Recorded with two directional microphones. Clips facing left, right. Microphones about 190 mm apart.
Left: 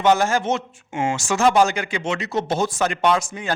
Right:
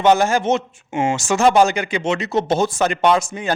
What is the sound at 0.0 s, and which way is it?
A man's voice, 20° right (ahead or behind).